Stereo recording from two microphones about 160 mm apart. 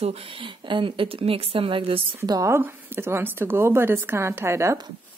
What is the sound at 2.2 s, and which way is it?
Speech, 20° right (ahead or behind).